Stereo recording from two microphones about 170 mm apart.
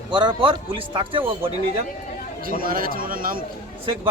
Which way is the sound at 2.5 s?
55° right (ahead or behind).